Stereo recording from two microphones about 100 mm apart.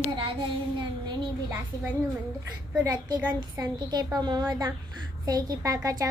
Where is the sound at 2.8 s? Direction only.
40° right (ahead or behind).